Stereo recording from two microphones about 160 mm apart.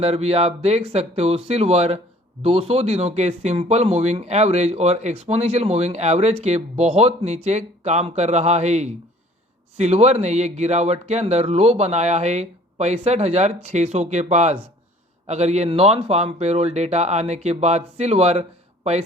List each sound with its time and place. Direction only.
0.0 s speech: 40° right (ahead or behind)